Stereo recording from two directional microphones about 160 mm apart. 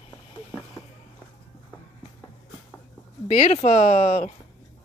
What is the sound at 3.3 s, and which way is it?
Speech, 45° left (ahead or behind).